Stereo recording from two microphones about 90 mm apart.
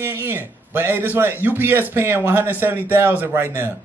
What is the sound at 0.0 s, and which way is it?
A man's voice, 25° right (ahead or behind).